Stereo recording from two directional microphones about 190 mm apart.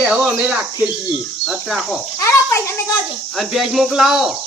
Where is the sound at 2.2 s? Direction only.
15° left (ahead or behind).